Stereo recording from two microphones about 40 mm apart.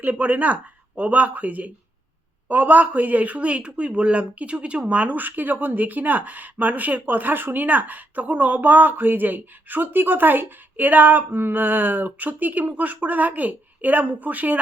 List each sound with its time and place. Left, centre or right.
0.0 s speech: right
5.1 s speech: right